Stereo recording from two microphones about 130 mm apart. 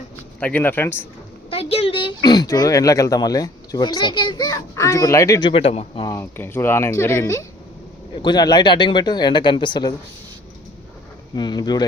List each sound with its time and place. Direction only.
0.3 s speech: 10° left (ahead or behind)
1.5 s speech: 45° left (ahead or behind); by 5.5 s 25° left (ahead or behind)
5.5 s speech: 45° left (ahead or behind)
6.1 s speech: 15° left (ahead or behind); by 9.9 s 35° left (ahead or behind)
11.3 s speech: 35° left (ahead or behind)